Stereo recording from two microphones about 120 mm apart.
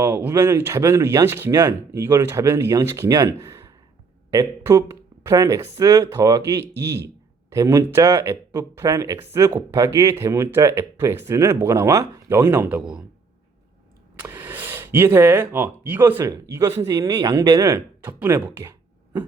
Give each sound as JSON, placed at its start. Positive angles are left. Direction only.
{"t": 0.0, "sound": "speech", "side_deg": -20}
{"t": 14.2, "sound": "speech", "side_deg": -15}